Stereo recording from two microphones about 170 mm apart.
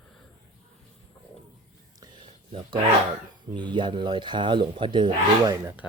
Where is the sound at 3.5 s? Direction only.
25° right (ahead or behind).